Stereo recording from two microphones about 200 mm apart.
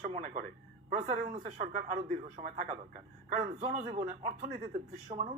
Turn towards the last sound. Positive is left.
turn(degrees=-30)  # may be behind; listen again after turning